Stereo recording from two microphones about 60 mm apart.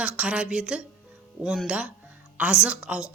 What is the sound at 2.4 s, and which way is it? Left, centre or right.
Speech, centre.